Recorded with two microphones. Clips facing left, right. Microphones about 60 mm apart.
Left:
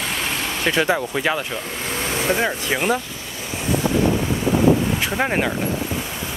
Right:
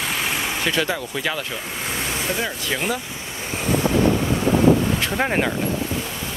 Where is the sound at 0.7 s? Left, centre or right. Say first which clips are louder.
Left 6 dB; left.